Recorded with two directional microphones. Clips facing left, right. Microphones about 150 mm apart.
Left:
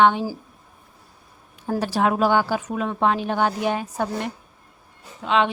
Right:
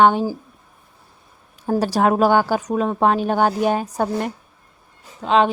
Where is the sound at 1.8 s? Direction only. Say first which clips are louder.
Right 4 dB; 40° right (ahead or behind).